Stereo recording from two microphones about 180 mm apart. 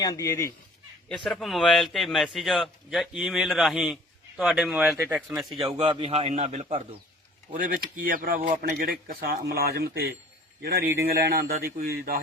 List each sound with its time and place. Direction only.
0.0 s speech: 20° left (ahead or behind)
1.0 s a man's voice: 5° left (ahead or behind)
5.5 s a man's voice: 30° right (ahead or behind); by 12.2 s 55° right (ahead or behind)